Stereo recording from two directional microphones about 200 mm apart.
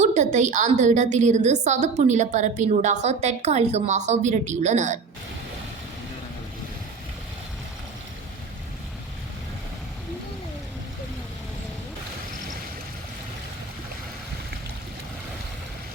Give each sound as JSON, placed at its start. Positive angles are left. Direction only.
{"t": 0.0, "sound": "a woman's voice", "side_deg": -35}